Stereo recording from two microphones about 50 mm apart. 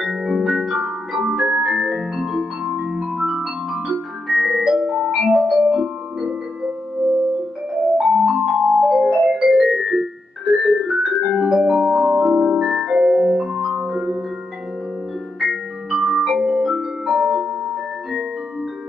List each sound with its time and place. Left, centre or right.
0.0 s music: centre
8.0 s music: centre
15.4 s music: centre